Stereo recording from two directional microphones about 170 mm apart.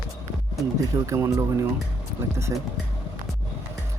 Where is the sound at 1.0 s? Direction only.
15° right (ahead or behind).